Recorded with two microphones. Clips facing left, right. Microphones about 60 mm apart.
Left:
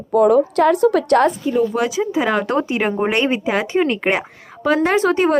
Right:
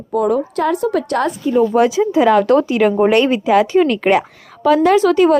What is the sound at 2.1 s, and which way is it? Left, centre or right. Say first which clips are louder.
Speech: right 6 dB; centre.